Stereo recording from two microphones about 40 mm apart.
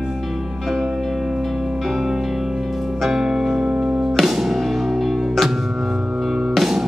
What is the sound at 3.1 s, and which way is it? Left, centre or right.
Music, centre.